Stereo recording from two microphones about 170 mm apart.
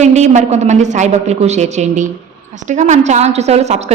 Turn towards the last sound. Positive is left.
turn(degrees=-40)  # may be behind; listen again after turning